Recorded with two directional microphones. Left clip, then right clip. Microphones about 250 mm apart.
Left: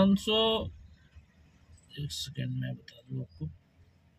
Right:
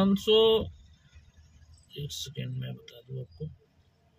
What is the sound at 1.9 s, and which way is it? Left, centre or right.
Speech, right.